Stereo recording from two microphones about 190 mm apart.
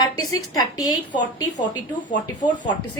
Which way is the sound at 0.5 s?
20° left (ahead or behind).